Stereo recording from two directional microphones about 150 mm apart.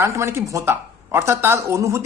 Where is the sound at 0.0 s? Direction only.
15° right (ahead or behind).